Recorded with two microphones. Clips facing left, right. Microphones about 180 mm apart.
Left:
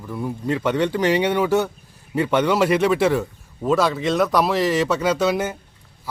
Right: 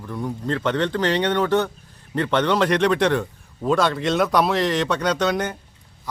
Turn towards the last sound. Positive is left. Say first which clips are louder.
# left 2 dB
turn(degrees=5)  # may be behind; listen again after turning